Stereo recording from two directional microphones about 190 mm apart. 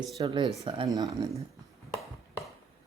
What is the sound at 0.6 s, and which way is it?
Speech, 30° right (ahead or behind).